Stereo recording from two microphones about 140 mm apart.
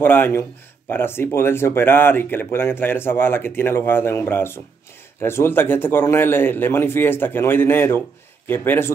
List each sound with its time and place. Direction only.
0.0 s speech: 15° left (ahead or behind)